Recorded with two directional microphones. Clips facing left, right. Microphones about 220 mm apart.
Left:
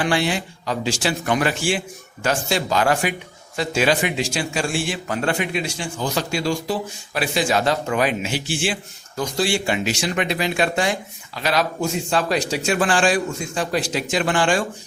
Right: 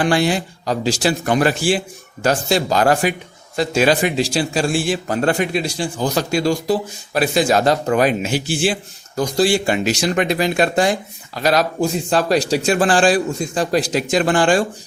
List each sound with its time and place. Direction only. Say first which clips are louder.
0.0 s a man's voice: right 4 dB; 40° right (ahead or behind)